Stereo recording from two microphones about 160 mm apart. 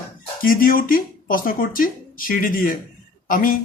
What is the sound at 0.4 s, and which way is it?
Speech, 65° left (ahead or behind).